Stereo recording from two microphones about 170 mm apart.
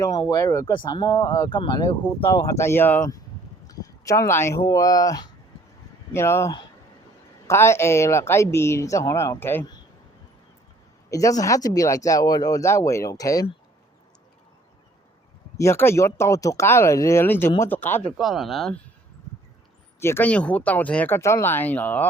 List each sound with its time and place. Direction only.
0.0 s speech: 20° left (ahead or behind)
11.1 s speech: 20° left (ahead or behind)
15.5 s speech: 15° left (ahead or behind)
18.2 s speech: centre (ahead or behind)
20.0 s speech: 15° left (ahead or behind)